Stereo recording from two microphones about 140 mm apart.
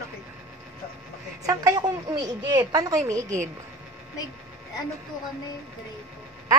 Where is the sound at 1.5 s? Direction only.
25° right (ahead or behind).